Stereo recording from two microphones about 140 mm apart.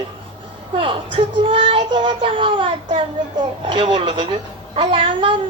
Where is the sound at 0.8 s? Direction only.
40° right (ahead or behind).